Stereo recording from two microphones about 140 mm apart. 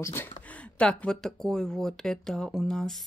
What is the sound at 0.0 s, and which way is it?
Speech, 15° left (ahead or behind).